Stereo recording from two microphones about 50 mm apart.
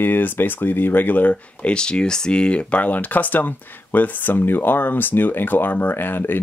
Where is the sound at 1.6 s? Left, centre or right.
Centre.